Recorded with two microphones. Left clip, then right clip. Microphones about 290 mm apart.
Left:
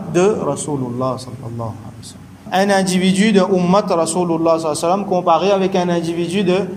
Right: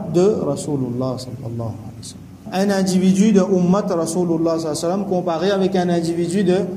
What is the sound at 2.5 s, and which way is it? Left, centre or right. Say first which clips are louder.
A man's voice: left 5 dB; centre.